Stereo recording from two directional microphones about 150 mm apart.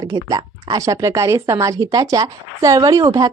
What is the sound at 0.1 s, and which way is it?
Speech, 30° right (ahead or behind).